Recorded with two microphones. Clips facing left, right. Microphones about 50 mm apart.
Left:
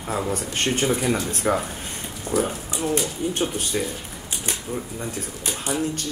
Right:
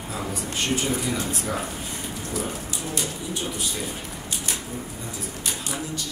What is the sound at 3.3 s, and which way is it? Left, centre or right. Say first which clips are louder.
Speech: left 4 dB; left.